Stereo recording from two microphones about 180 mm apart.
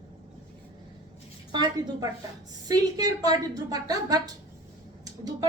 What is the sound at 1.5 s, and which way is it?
A woman's voice, 25° right (ahead or behind).